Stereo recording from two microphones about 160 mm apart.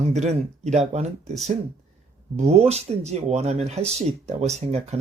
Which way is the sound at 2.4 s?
40° right (ahead or behind).